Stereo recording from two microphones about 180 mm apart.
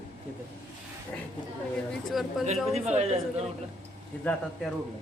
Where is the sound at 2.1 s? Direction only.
Centre (ahead or behind).